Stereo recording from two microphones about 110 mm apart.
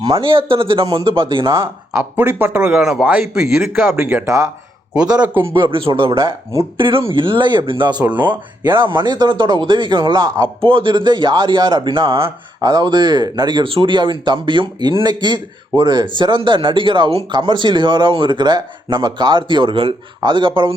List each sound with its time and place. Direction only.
0.1 s speech: 55° right (ahead or behind)
1.9 s speech: 15° right (ahead or behind)
3.8 s speech: 15° right (ahead or behind)
4.3 s speech: 30° right (ahead or behind)
5.5 s speech: 50° right (ahead or behind)
8.1 s speech: 15° right (ahead or behind)
8.6 s speech: 45° right (ahead or behind)
12.6 s speech: 40° right (ahead or behind)
13.7 s speech: 55° right (ahead or behind)
17.3 s speech: 45° right (ahead or behind)